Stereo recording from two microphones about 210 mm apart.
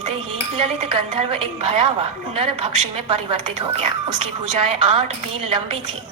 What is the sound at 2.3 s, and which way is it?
A woman's voice, 25° right (ahead or behind).